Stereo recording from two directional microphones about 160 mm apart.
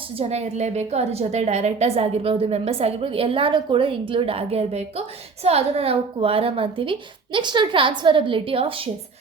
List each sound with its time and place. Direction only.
0.2 s a woman's voice: 40° right (ahead or behind)